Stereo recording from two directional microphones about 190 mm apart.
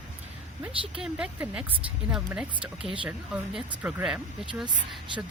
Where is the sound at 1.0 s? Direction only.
5° right (ahead or behind).